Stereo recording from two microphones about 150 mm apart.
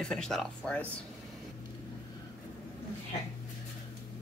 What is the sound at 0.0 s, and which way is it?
Speech, 5° left (ahead or behind).